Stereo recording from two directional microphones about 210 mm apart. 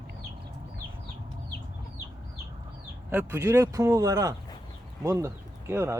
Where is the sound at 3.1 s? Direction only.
10° right (ahead or behind).